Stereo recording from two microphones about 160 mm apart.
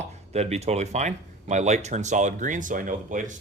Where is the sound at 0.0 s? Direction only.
45° right (ahead or behind).